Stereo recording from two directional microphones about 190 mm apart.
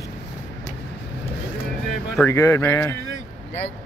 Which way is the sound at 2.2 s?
15° left (ahead or behind).